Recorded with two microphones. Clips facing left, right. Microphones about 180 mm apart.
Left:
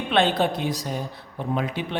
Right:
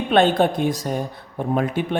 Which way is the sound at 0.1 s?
45° right (ahead or behind).